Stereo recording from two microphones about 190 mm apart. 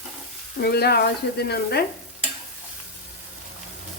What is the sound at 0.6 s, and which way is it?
Speech, 55° left (ahead or behind).